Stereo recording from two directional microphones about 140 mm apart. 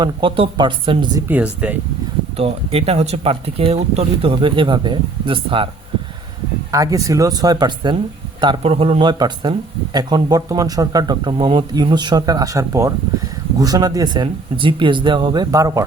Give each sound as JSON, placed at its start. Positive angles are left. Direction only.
{"t": 0.0, "sound": "speech", "side_deg": -35}
{"t": 1.3, "sound": "speech", "side_deg": -10}
{"t": 2.4, "sound": "speech", "side_deg": -45}
{"t": 6.7, "sound": "speech", "side_deg": -25}